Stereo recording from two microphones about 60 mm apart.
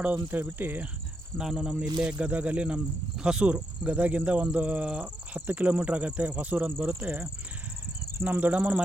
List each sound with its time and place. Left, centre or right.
0.0 s speech: right
1.4 s speech: centre
2.1 s speech: right
8.2 s speech: right